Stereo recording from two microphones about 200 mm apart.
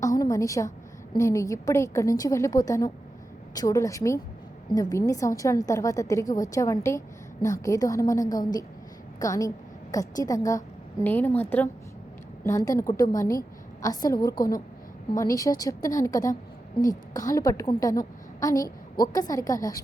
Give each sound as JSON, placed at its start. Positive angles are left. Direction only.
{"t": 0.0, "sound": "a sound", "side_deg": 15}
{"t": 1.2, "sound": "a woman's voice", "side_deg": 15}
{"t": 14.3, "sound": "a woman's voice", "side_deg": 45}
{"t": 15.2, "sound": "a woman's voice", "side_deg": 15}